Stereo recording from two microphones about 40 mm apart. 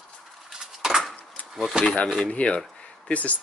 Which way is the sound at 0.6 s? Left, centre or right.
Centre.